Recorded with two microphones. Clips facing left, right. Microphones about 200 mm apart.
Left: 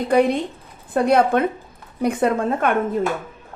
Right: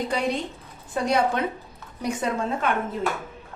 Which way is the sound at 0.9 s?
55° left (ahead or behind).